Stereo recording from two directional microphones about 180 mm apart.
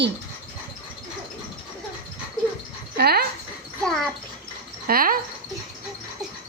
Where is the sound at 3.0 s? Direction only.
60° right (ahead or behind).